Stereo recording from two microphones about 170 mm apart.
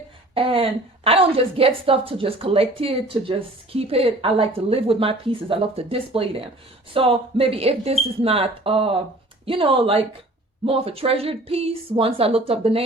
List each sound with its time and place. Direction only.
0.3 s a woman's voice: 35° right (ahead or behind)